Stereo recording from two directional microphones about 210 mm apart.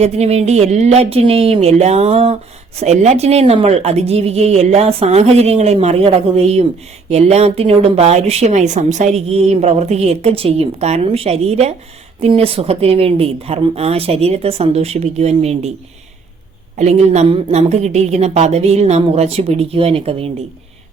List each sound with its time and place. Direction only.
0.0 s a woman's voice: 30° right (ahead or behind)
16.7 s speech: 30° right (ahead or behind)